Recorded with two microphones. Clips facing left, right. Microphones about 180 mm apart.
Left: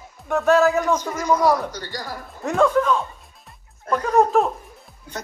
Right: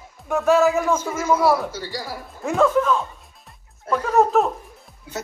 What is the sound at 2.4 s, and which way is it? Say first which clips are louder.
Speech: even; centre (ahead or behind).